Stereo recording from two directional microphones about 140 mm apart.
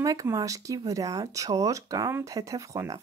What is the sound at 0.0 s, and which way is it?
Speech, 25° right (ahead or behind).